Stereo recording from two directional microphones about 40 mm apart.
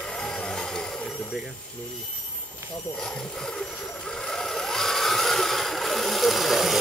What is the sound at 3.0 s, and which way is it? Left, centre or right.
Speech, centre.